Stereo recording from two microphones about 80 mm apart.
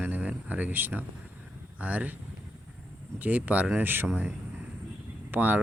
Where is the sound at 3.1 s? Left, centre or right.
Right.